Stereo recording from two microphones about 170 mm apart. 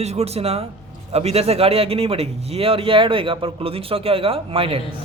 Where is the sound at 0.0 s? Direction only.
40° right (ahead or behind).